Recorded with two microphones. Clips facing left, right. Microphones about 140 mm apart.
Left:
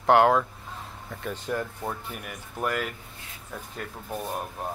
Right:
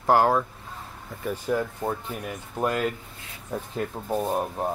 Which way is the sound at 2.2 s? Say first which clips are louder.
Right 4 dB; 25° right (ahead or behind).